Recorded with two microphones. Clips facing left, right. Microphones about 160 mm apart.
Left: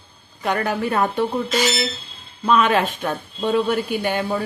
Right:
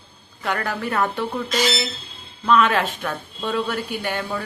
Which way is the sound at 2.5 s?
20° left (ahead or behind).